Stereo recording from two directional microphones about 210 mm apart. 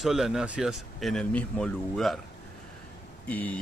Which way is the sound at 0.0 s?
Centre (ahead or behind).